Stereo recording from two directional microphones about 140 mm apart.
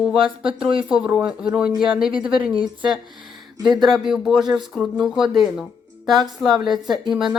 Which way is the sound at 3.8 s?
Centre (ahead or behind).